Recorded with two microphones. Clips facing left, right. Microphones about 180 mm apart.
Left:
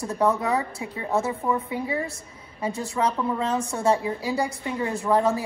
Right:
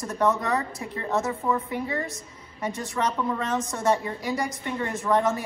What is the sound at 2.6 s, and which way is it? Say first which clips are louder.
A woman's voice: left 2 dB; 30° left (ahead or behind).